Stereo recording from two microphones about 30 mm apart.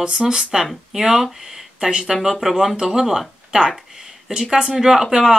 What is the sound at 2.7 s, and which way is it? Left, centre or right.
Speech, right.